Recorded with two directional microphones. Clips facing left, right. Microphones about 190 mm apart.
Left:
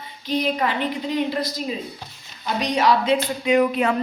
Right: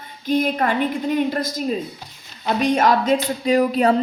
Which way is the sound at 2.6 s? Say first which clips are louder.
Right 2 dB; 50° right (ahead or behind).